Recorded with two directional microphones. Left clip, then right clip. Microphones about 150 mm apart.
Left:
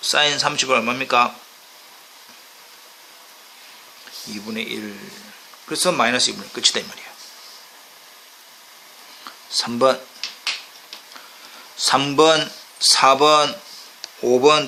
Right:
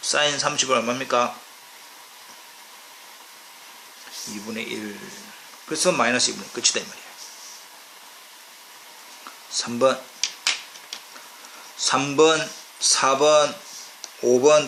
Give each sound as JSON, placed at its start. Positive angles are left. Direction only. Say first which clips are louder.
{"t": 0.0, "sound": "a man's voice", "louder": "left 4 dB", "side_deg": 35}
{"t": 4.5, "sound": "a man's voice", "louder": "left 3 dB", "side_deg": 30}
{"t": 9.5, "sound": "speech", "louder": "left 3 dB", "side_deg": 45}
{"t": 11.8, "sound": "a man's voice", "louder": "left 3 dB", "side_deg": 45}